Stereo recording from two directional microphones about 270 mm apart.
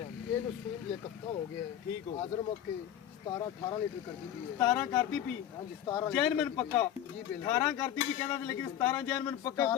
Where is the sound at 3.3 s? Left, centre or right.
Centre.